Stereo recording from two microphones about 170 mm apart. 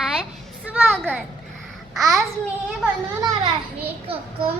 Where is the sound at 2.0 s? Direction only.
20° right (ahead or behind).